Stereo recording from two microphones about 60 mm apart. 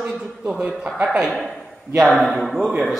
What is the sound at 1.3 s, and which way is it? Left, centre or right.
A man's voice, centre.